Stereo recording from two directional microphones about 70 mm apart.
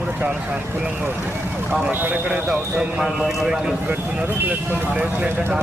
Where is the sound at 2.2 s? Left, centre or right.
Centre.